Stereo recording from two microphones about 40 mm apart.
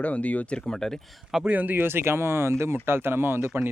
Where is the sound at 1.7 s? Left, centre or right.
Right.